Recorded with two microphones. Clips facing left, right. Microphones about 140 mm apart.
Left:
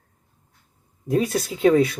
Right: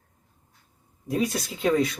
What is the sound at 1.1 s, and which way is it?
Speech, centre (ahead or behind).